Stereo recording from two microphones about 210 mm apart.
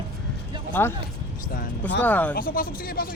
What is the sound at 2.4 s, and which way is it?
Speech, 45° left (ahead or behind).